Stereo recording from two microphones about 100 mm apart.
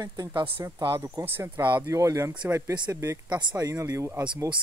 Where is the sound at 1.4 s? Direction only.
20° right (ahead or behind).